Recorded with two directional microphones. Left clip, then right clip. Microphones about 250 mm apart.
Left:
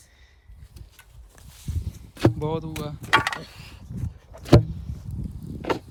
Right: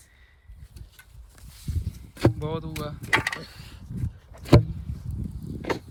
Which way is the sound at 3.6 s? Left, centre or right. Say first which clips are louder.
Even; centre.